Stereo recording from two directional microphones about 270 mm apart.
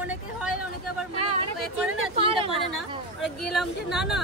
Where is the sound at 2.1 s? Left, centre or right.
Centre.